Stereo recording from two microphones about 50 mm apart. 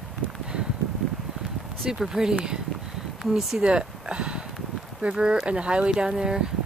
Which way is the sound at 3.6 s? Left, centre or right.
Right.